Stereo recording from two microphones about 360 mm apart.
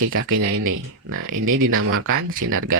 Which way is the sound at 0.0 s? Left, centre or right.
Right.